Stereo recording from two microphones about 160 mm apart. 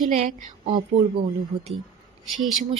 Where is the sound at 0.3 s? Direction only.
50° right (ahead or behind).